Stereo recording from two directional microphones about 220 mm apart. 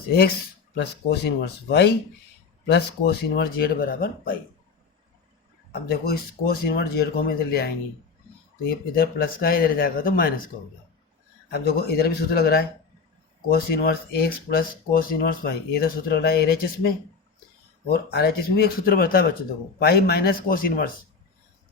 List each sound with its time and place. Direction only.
0.8 s speech: 50° left (ahead or behind)
5.8 s speech: 45° left (ahead or behind)
9.0 s speech: 45° left (ahead or behind)
11.4 s speech: 45° left (ahead or behind)